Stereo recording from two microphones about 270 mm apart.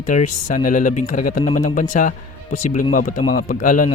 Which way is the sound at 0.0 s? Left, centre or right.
Left.